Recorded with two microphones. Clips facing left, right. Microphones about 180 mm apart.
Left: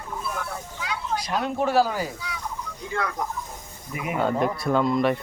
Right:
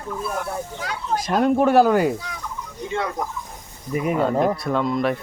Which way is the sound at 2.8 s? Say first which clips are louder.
Right 3 dB; 25° right (ahead or behind).